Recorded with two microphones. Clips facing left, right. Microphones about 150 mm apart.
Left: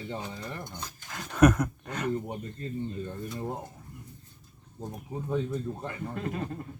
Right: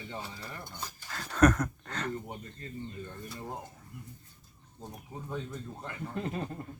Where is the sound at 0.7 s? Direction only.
10° right (ahead or behind).